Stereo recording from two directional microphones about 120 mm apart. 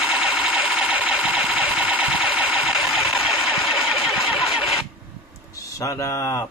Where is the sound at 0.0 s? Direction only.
5° right (ahead or behind).